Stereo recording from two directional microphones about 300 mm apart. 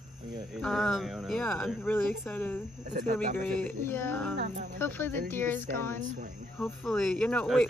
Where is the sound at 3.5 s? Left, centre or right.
Centre.